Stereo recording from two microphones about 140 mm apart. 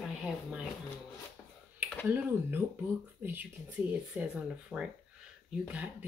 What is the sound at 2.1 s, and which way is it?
A woman's voice, 15° right (ahead or behind).